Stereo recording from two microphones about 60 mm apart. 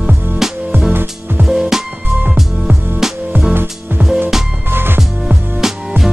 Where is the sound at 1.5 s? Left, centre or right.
Centre.